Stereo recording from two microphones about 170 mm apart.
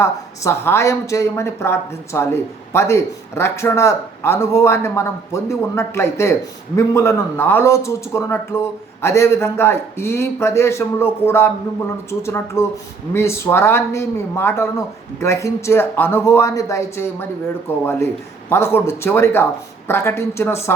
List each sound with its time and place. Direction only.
0.0 s speech: 15° left (ahead or behind)